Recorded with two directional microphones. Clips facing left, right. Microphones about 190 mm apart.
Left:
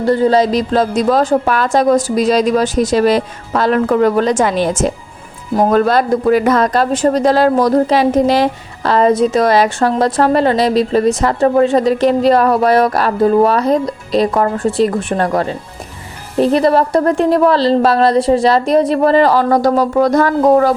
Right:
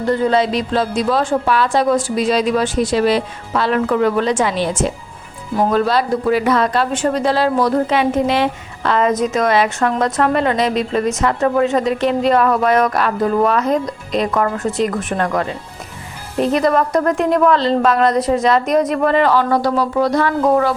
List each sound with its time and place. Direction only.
0.0 s a woman's voice: 35° left (ahead or behind)